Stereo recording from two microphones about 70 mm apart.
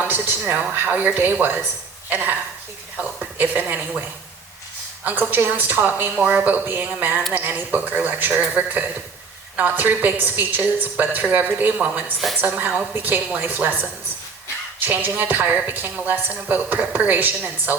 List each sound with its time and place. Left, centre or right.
0.0 s speech: right
3.3 s speech: right
5.3 s speech: right
6.1 s speech: centre
14.8 s speech: right